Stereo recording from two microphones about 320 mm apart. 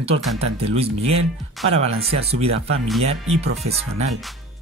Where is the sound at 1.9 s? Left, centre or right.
Centre.